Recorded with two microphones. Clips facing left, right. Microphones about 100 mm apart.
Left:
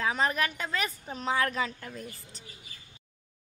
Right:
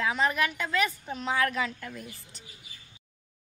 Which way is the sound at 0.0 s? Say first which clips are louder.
Right 1 dB; 40° left (ahead or behind).